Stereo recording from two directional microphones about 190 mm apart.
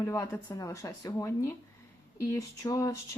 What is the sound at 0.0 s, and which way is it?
Speech, 15° left (ahead or behind).